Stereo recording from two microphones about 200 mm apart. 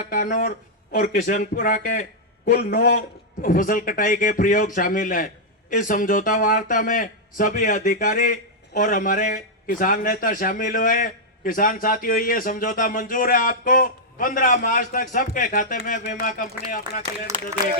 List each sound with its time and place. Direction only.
0.1 s speech: 40° left (ahead or behind)